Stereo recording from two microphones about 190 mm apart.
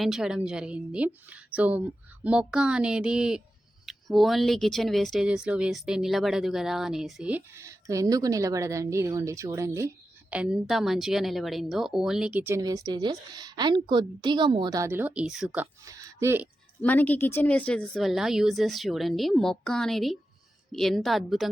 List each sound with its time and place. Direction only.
0.0 s speech: 5° right (ahead or behind)
16.8 s speech: 10° left (ahead or behind)